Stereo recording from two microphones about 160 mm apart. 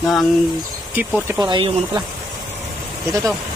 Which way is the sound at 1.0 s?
10° right (ahead or behind).